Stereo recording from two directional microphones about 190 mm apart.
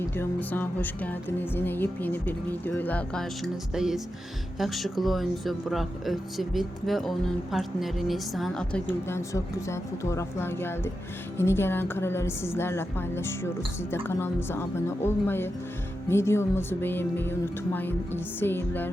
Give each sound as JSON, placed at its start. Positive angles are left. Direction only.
{"t": 0.2, "sound": "music", "side_deg": 10}
{"t": 4.5, "sound": "speech", "side_deg": 0}
{"t": 11.3, "sound": "music", "side_deg": 15}